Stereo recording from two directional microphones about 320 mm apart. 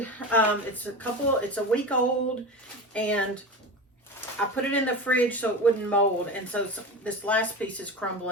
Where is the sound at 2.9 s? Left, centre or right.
Centre.